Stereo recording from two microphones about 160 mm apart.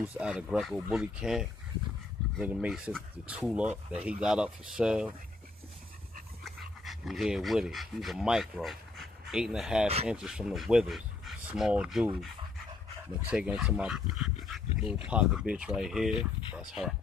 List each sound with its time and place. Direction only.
0.0 s speech: 5° right (ahead or behind)
6.4 s speech: centre (ahead or behind)
13.3 s speech: 5° right (ahead or behind)